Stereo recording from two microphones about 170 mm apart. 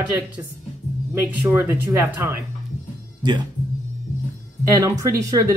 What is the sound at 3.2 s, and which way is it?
Speech, 25° right (ahead or behind).